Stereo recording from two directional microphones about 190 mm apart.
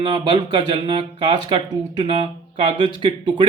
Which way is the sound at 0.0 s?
20° right (ahead or behind).